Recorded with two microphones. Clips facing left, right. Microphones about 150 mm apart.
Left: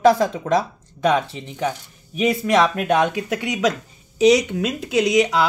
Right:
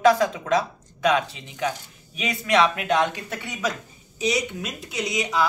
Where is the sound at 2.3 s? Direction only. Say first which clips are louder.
Left 3 dB; 45° left (ahead or behind); by 5.2 s 90° left.